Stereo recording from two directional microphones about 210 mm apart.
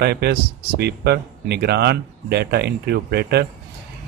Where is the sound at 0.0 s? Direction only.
50° right (ahead or behind).